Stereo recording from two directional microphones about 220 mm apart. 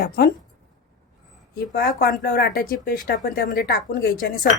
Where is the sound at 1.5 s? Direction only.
40° left (ahead or behind).